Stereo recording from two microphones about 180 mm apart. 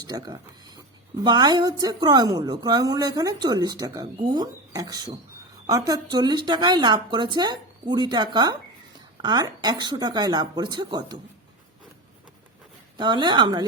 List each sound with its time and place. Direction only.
0.0 s a woman's voice: 20° right (ahead or behind)
13.0 s a woman's voice: 25° right (ahead or behind)